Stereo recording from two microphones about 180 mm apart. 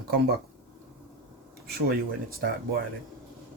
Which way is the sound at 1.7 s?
60° right (ahead or behind).